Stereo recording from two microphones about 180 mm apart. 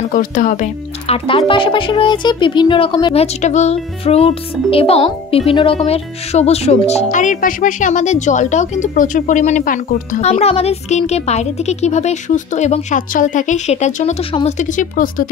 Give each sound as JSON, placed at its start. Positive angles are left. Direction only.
{"t": 0.1, "sound": "speech", "side_deg": 45}